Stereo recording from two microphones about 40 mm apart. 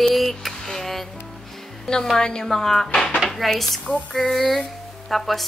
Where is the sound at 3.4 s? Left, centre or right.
Centre.